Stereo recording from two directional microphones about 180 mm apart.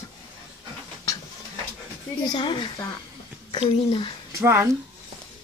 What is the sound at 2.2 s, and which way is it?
Speech, 25° left (ahead or behind).